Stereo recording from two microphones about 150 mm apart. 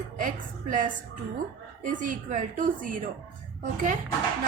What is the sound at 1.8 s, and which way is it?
A woman's voice, 60° right (ahead or behind).